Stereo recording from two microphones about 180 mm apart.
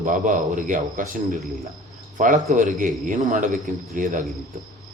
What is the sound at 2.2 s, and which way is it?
Speech, 45° right (ahead or behind).